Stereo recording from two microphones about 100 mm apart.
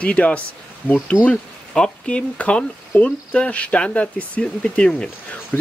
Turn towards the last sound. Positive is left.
turn(degrees=15)  # may be behind; listen again after turning